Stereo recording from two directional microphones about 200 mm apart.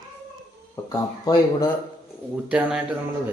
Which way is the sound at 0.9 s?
15° left (ahead or behind).